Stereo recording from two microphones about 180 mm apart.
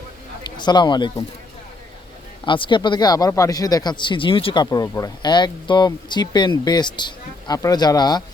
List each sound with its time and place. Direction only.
0.4 s speech: 25° left (ahead or behind)
2.4 s speech: 25° left (ahead or behind)